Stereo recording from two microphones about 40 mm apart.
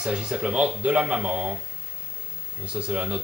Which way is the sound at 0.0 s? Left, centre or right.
Right.